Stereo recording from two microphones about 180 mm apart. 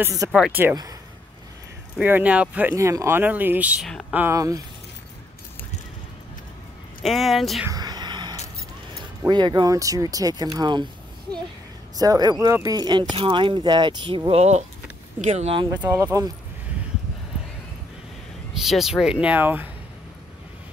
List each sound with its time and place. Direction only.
0.0 s speech: 20° right (ahead or behind)
0.3 s speech: 5° right (ahead or behind)
2.0 s speech: 10° right (ahead or behind)
7.0 s speech: centre (ahead or behind)
7.6 s a sound: 20° right (ahead or behind)
9.3 s speech: 25° right (ahead or behind)
12.0 s speech: 20° right (ahead or behind); by 15.6 s 35° right (ahead or behind)
15.8 s speech: 15° right (ahead or behind)
18.6 s speech: centre (ahead or behind)